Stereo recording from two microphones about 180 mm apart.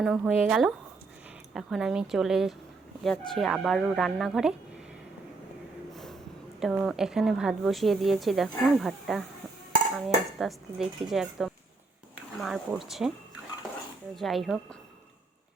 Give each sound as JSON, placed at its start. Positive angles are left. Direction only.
{"t": 0.0, "sound": "a woman's voice", "side_deg": 0}
{"t": 5.9, "sound": "snort", "side_deg": 0}
{"t": 6.6, "sound": "a woman's voice", "side_deg": 0}
{"t": 10.3, "sound": "a woman's voice", "side_deg": 0}
{"t": 14.2, "sound": "a woman's voice", "side_deg": 0}